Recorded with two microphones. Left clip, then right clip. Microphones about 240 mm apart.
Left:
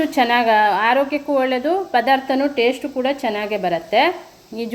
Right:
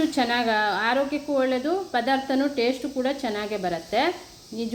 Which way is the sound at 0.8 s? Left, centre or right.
Centre.